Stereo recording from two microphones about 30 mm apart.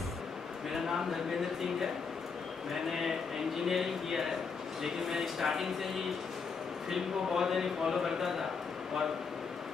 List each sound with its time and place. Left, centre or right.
2.7 s a man's voice: centre
6.9 s a man's voice: centre